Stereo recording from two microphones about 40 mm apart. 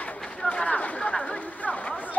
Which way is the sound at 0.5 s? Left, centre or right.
Left.